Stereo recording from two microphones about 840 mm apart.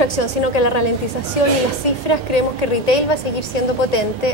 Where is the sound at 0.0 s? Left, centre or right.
Left.